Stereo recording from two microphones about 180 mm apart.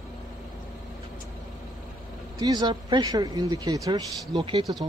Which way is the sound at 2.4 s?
20° right (ahead or behind).